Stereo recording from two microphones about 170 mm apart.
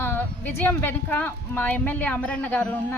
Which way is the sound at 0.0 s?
10° left (ahead or behind).